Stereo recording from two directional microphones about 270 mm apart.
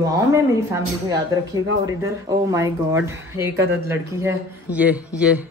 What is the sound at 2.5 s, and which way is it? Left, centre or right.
A woman's voice, centre.